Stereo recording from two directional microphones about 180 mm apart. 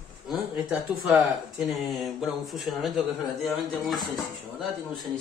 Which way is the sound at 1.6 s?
Centre (ahead or behind).